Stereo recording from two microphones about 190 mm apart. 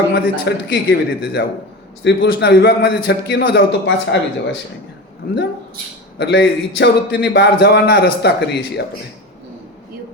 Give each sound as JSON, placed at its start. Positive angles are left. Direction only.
{"t": 0.1, "sound": "a man's voice", "side_deg": 60}
{"t": 6.1, "sound": "a man's voice", "side_deg": 65}